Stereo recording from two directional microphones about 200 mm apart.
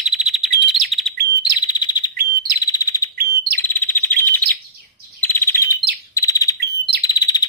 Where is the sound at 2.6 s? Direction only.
15° left (ahead or behind).